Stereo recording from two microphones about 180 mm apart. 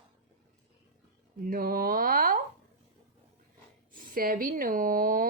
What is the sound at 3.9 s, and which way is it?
A woman's voice, 50° right (ahead or behind).